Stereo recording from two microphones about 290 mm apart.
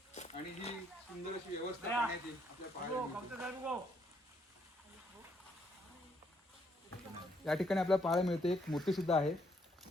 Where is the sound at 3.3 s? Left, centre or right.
Centre.